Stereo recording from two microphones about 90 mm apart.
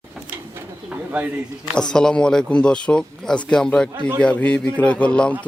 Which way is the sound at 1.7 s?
10° left (ahead or behind).